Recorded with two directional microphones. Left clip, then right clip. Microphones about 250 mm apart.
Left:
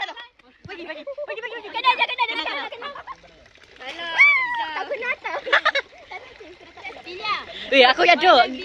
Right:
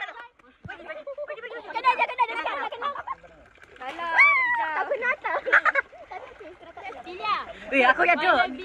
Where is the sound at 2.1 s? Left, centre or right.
Centre.